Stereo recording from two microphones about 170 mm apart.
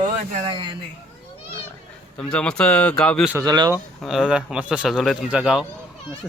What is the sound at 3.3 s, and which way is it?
Speech, 25° right (ahead or behind).